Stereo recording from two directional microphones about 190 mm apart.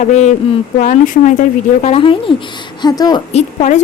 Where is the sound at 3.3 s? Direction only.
40° left (ahead or behind).